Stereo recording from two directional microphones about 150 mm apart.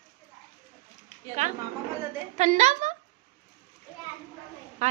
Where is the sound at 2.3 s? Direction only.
50° right (ahead or behind).